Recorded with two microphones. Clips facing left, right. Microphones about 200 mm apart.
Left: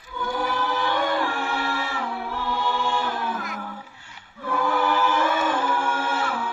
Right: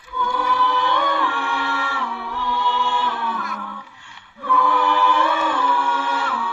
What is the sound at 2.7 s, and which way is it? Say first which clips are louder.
Music: right 2 dB; 40° left (ahead or behind).